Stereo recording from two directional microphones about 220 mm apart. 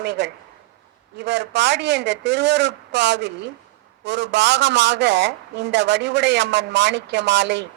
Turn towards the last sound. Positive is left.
turn(degrees=-55)  # may be behind; listen again after turning